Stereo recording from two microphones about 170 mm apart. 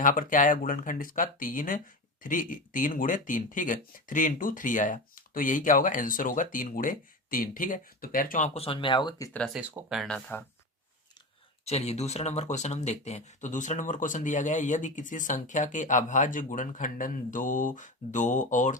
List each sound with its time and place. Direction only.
0.0 s speech: 50° left (ahead or behind); by 9.4 s 20° left (ahead or behind)
9.4 s speech: centre (ahead or behind)
11.6 s speech: 40° left (ahead or behind)